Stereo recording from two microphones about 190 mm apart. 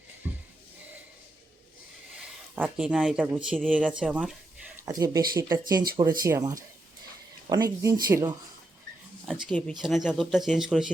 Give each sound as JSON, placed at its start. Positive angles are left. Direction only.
{"t": 2.6, "sound": "speech", "side_deg": -5}
{"t": 9.2, "sound": "speech", "side_deg": 0}